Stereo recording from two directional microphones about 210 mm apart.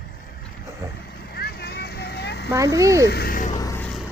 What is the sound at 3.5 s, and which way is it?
Vehicle, 15° left (ahead or behind).